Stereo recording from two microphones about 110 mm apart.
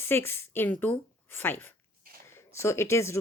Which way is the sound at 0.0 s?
20° left (ahead or behind).